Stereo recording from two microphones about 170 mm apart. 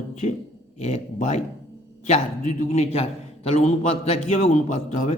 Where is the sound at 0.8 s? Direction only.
40° left (ahead or behind).